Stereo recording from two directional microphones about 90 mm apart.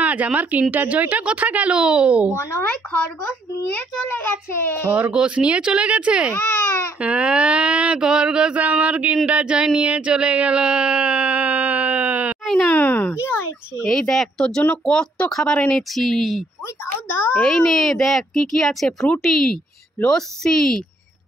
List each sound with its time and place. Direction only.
0.0 s mantra: 15° right (ahead or behind)
3.7 s a child's voice: 25° left (ahead or behind)
4.9 s mantra: 15° right (ahead or behind)
6.3 s baby cry: 25° left (ahead or behind)
7.0 s mantra: 15° right (ahead or behind)
12.6 s speech: 20° left (ahead or behind)
13.8 s speech: 5° left (ahead or behind)
16.8 s a child's voice: 25° left (ahead or behind)
17.6 s speech: 5° left (ahead or behind)